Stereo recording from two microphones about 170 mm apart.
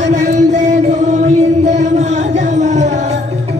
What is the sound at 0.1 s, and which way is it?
Music, 45° right (ahead or behind).